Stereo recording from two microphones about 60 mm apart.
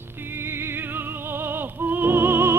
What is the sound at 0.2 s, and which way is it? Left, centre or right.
Music, right.